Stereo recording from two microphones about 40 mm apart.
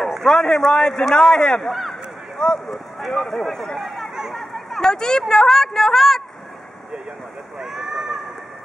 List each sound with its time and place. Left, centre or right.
0.2 s speech: centre
1.6 s a sound: centre
2.7 s speech: centre
4.1 s chatter: centre
4.4 s a sound: centre
4.8 s speech: centre
7.5 s speech: centre